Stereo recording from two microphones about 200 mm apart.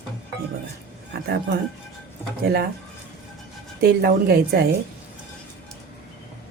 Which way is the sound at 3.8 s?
50° right (ahead or behind).